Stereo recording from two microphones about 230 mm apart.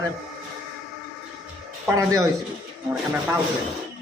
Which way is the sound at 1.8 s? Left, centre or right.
Centre.